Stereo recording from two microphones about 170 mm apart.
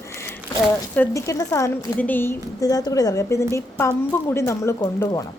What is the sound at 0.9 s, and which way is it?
A woman's voice, 20° left (ahead or behind).